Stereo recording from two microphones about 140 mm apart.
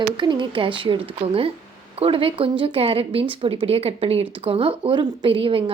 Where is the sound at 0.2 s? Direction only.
35° right (ahead or behind).